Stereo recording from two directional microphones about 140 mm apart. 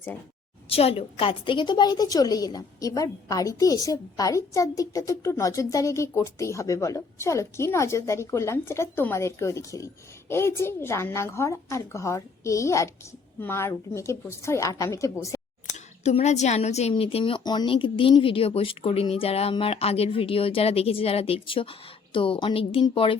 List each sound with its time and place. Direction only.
0.7 s a woman's voice: 45° left (ahead or behind); by 15.4 s 20° left (ahead or behind)
15.6 s a woman's voice: 55° left (ahead or behind); by 23.1 s 40° left (ahead or behind)